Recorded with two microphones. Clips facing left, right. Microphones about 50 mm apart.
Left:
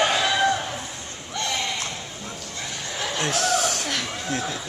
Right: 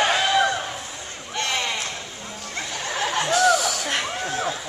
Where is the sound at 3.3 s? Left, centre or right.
Left.